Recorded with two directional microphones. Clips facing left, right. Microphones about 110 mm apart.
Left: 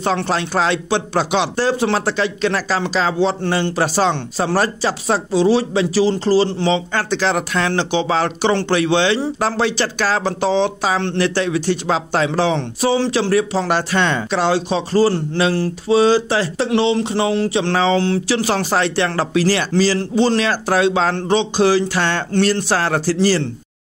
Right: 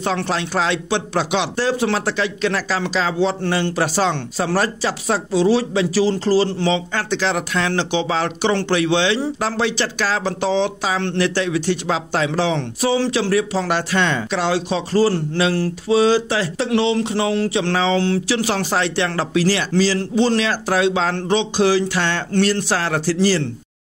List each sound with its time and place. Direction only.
0.0 s speech: 35° left (ahead or behind)
6.9 s speech: 40° left (ahead or behind)
17.7 s speech: 40° left (ahead or behind)